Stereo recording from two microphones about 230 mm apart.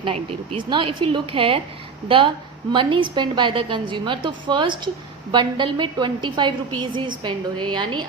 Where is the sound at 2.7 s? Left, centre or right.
Right.